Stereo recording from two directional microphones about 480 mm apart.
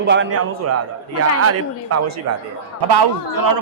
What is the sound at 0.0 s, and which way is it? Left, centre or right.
A man's voice, right.